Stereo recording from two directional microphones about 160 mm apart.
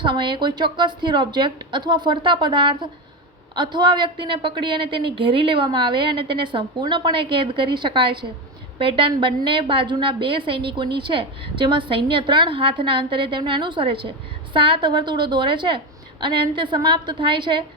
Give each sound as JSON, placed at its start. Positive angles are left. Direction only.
{"t": 0.0, "sound": "a woman's voice", "side_deg": -30}